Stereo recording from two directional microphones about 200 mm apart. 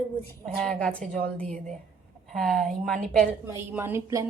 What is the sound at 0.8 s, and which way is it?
Speech, 5° left (ahead or behind).